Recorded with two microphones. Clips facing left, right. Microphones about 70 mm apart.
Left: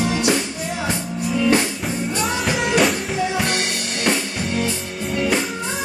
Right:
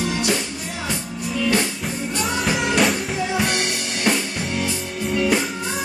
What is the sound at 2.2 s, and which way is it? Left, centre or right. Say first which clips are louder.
Music: right 1 dB; centre.